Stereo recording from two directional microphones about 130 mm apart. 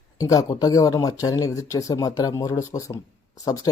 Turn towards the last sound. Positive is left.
turn(degrees=25)  # may be behind; listen again after turning